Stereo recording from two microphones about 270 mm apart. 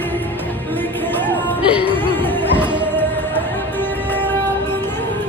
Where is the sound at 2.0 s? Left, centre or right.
Centre.